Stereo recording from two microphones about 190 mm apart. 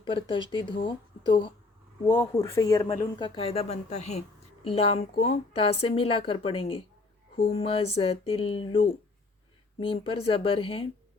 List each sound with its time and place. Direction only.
0.0 s a woman's voice: 25° left (ahead or behind)
2.0 s a woman's voice: 15° left (ahead or behind)